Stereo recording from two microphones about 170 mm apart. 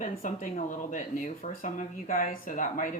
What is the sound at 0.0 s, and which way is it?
Speech, 50° left (ahead or behind).